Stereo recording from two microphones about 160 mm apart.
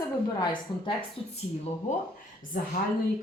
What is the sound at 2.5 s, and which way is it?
Speech, 65° left (ahead or behind).